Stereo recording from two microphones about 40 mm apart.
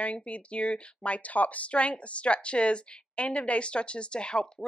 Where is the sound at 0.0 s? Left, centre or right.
Left.